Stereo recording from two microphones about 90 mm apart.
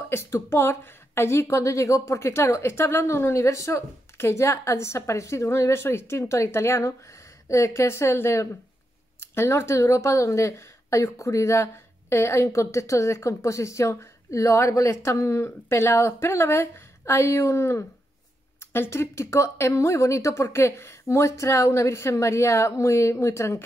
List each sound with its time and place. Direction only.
0.1 s speech: 30° left (ahead or behind)